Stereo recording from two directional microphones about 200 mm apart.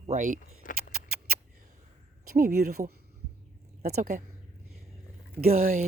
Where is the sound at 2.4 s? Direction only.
50° right (ahead or behind).